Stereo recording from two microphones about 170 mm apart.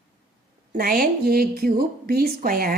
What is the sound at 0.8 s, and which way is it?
A woman's voice, 60° right (ahead or behind).